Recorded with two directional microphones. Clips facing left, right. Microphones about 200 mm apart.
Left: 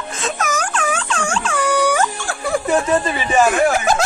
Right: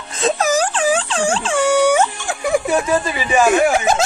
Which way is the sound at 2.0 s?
15° right (ahead or behind).